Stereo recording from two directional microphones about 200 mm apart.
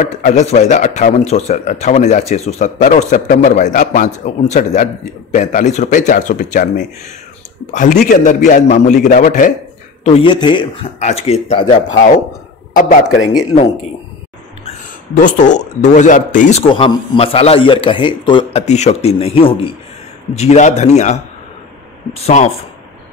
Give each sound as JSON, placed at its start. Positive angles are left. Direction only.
{"t": 0.0, "sound": "speech", "side_deg": 40}
{"t": 10.0, "sound": "a man's voice", "side_deg": 25}
{"t": 15.1, "sound": "speech", "side_deg": 40}
{"t": 16.7, "sound": "a man's voice", "side_deg": 25}
{"t": 22.2, "sound": "speech", "side_deg": 35}